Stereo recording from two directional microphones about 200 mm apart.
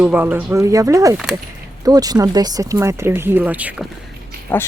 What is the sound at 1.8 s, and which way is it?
Speech, 20° right (ahead or behind).